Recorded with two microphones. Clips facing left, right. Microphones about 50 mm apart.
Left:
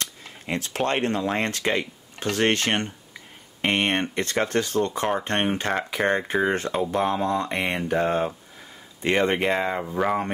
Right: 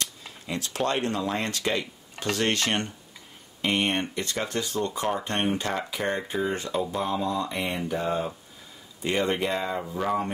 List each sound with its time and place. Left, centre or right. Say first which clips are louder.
0.0 s speech: left 1 dB; left
3.6 s speech: left 3 dB; left
9.0 s speech: left 4 dB; left
9.8 s speech: left 4 dB; left